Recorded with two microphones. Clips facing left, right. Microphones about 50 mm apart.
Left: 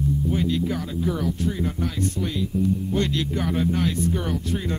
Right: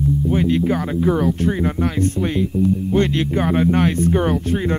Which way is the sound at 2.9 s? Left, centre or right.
Right.